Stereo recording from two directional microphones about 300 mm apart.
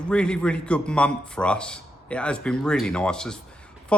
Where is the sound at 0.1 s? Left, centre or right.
Centre.